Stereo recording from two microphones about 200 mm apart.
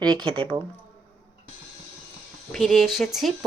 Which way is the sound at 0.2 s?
25° right (ahead or behind).